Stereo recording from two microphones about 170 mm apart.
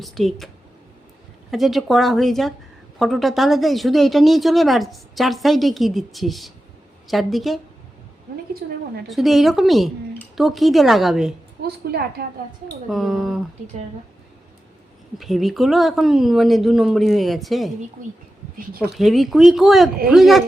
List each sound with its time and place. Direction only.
0.0 s speech: centre (ahead or behind)
9.0 s speech: centre (ahead or behind)
11.6 s a woman's voice: 65° right (ahead or behind)
12.9 s speech: centre (ahead or behind)
15.2 s speech: centre (ahead or behind)
18.8 s speech: centre (ahead or behind)